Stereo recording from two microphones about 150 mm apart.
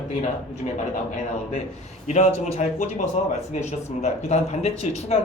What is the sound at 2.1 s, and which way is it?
Speech, 50° left (ahead or behind).